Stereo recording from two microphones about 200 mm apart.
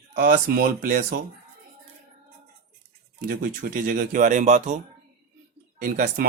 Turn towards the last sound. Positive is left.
turn(degrees=-45)  # may be behind; listen again after turning